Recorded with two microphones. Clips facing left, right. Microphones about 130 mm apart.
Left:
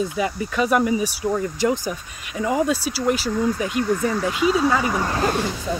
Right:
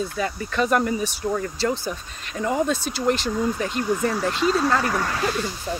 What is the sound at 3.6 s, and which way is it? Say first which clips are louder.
Speech: left 2 dB; 10° left (ahead or behind).